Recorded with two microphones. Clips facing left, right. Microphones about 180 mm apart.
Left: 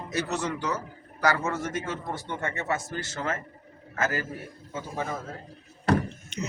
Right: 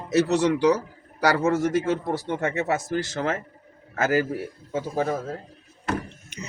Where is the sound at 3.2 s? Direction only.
55° right (ahead or behind).